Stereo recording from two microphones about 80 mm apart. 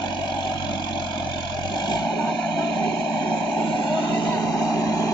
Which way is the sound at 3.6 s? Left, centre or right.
Left.